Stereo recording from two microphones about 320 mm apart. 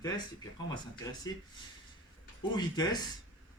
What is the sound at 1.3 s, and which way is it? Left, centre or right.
Speech, centre.